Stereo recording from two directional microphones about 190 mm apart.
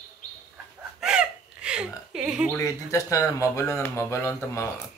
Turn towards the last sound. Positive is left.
turn(degrees=15)  # may be behind; listen again after turning